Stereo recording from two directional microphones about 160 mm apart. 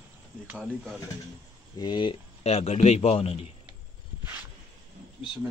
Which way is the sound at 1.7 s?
30° left (ahead or behind).